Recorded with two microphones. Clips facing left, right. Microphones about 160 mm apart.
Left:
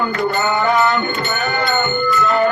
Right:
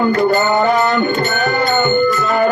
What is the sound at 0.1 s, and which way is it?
Music, 40° right (ahead or behind).